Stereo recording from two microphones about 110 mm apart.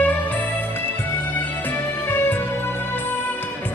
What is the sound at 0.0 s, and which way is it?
Music, 15° left (ahead or behind).